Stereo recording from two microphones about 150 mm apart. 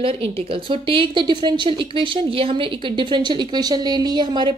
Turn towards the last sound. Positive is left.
turn(degrees=-30)  # may be behind; listen again after turning